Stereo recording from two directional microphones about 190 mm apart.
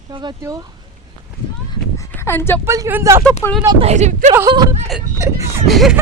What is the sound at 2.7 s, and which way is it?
Speech, 15° right (ahead or behind).